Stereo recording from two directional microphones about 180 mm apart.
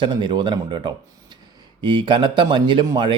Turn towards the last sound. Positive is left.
turn(degrees=-25)  # may be behind; listen again after turning